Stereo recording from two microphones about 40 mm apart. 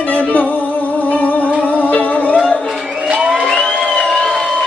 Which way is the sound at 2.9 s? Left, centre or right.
Right.